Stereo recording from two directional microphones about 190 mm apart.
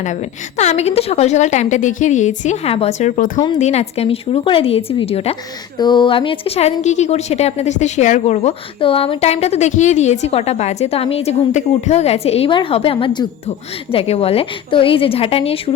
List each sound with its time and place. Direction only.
0.0 s a woman's voice: 35° left (ahead or behind)
3.3 s speech: 25° left (ahead or behind)
3.6 s a woman's voice: 35° left (ahead or behind)